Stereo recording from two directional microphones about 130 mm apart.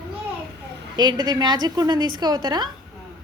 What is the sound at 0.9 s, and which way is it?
A woman's voice, 35° right (ahead or behind).